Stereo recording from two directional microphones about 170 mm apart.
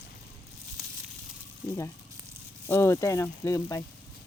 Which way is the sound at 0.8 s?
Centre (ahead or behind).